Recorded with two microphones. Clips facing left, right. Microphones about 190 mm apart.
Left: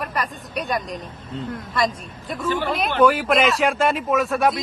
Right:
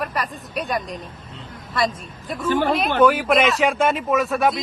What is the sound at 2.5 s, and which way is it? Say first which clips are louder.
Speech: right 4 dB; 45° right (ahead or behind).